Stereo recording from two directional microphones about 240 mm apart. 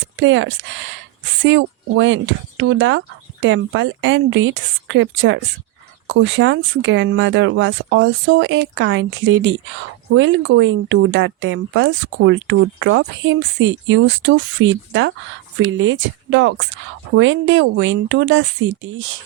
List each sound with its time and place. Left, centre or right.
0.2 s speech: right